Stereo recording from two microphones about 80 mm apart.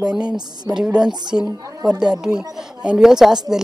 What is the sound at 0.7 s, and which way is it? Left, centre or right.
A woman's voice, centre.